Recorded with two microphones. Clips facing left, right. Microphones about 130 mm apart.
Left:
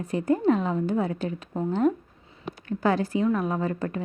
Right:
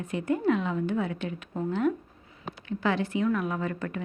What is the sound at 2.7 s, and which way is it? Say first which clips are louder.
A woman's voice: left 3 dB; 40° left (ahead or behind).